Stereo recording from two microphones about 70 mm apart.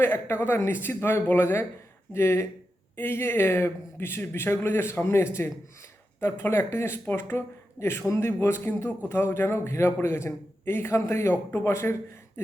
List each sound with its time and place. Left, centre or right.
0.0 s a man's voice: left